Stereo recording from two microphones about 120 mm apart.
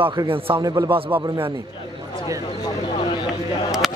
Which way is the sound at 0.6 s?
30° right (ahead or behind).